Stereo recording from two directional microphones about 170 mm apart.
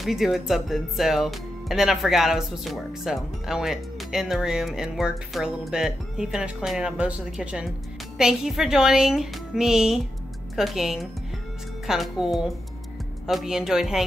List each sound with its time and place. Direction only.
0.0 s speech: centre (ahead or behind)